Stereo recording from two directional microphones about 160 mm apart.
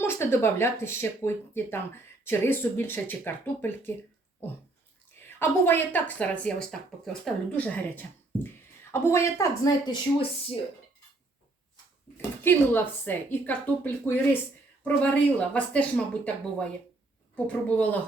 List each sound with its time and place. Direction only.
0.0 s a woman's voice: 15° left (ahead or behind); by 10.6 s 30° left (ahead or behind)
12.1 s a woman's voice: 15° left (ahead or behind)